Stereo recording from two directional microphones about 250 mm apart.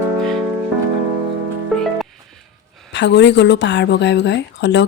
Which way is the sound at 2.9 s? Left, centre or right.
Left.